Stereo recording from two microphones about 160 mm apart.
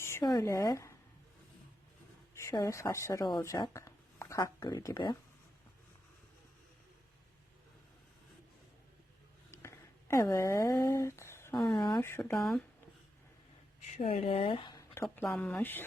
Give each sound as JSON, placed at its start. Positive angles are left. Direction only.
{"t": 0.0, "sound": "speech", "side_deg": 20}
{"t": 2.4, "sound": "speech", "side_deg": 20}
{"t": 9.5, "sound": "a sound", "side_deg": 20}
{"t": 11.9, "sound": "speech", "side_deg": 15}
{"t": 12.4, "sound": "speech", "side_deg": 0}
{"t": 13.9, "sound": "speech", "side_deg": 40}
{"t": 15.0, "sound": "speech", "side_deg": 10}